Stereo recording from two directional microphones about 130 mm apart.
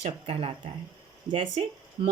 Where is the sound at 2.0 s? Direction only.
45° right (ahead or behind).